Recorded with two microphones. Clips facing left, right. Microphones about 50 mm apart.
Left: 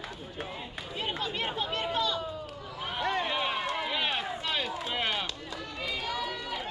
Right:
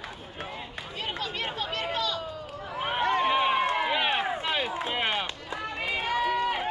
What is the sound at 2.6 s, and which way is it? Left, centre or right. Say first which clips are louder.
Run: right 7 dB; right.